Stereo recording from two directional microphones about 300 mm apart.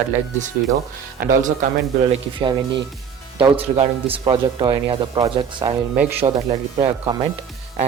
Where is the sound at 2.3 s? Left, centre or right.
Centre.